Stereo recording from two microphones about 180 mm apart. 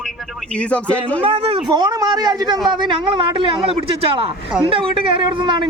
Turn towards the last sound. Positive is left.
turn(degrees=-25)  # may be behind; listen again after turning